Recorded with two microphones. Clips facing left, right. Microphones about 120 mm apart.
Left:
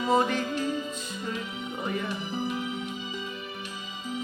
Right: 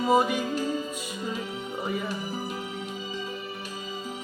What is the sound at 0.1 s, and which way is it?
Music, 10° right (ahead or behind).